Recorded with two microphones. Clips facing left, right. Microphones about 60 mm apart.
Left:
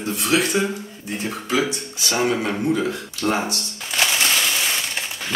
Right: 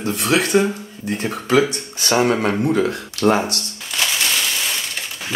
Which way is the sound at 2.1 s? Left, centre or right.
Right.